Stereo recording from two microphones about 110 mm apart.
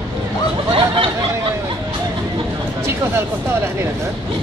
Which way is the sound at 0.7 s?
50° right (ahead or behind).